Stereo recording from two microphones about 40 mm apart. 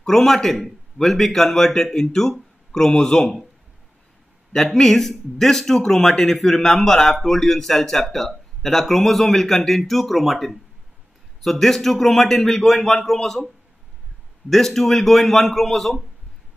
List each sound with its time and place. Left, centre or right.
0.0 s a man's voice: centre
4.5 s a man's voice: centre
14.5 s a man's voice: centre